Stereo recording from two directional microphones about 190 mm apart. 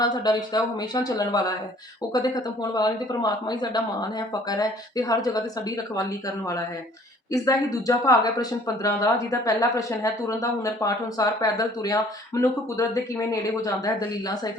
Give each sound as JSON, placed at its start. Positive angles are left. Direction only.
{"t": 0.0, "sound": "speech", "side_deg": 20}